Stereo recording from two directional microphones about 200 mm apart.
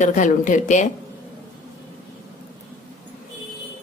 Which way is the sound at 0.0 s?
40° left (ahead or behind).